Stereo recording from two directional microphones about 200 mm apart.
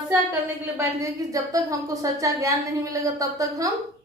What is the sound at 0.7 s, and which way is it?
A woman's voice, 15° right (ahead or behind).